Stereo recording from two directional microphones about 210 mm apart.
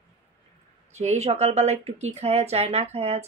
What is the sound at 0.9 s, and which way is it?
Speech, 30° right (ahead or behind).